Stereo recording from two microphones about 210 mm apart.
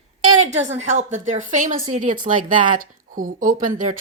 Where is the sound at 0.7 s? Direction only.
35° right (ahead or behind).